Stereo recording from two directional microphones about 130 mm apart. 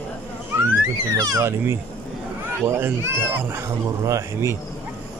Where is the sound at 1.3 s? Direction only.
20° right (ahead or behind).